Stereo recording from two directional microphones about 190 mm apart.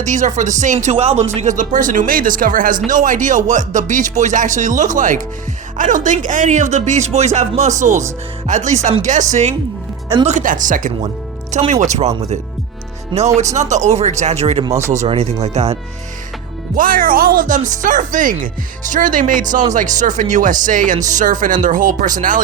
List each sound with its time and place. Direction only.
0.0 s speech: 40° right (ahead or behind)
14.6 s speech: 15° right (ahead or behind)
14.8 s speech: 35° right (ahead or behind)
16.7 s speech: 45° right (ahead or behind)